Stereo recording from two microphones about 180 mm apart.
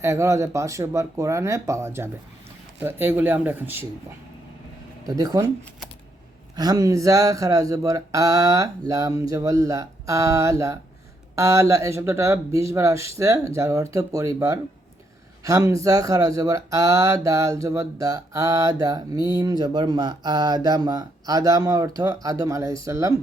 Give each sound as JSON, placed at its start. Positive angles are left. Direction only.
{"t": 0.0, "sound": "speech", "side_deg": -15}
{"t": 5.0, "sound": "speech", "side_deg": -20}
{"t": 6.6, "sound": "speech", "side_deg": -20}